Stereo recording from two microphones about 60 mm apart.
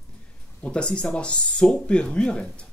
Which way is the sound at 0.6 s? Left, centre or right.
Centre.